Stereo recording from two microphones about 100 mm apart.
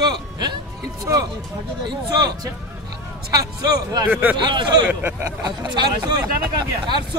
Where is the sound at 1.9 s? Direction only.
40° right (ahead or behind).